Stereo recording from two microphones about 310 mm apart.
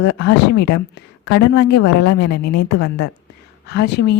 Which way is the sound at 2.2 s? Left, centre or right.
Left.